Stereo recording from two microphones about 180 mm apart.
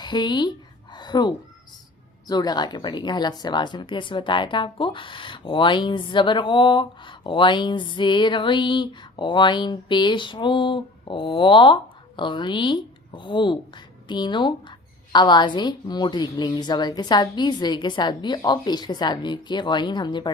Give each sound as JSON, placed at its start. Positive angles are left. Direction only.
{"t": 0.0, "sound": "a woman's voice", "side_deg": 25}
{"t": 0.9, "sound": "a sound", "side_deg": 25}
{"t": 2.2, "sound": "speech", "side_deg": 20}